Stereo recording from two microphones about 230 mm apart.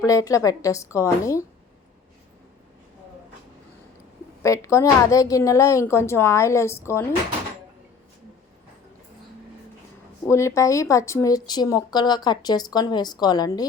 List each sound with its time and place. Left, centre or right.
0.0 s speech: centre
4.4 s speech: centre
10.2 s speech: centre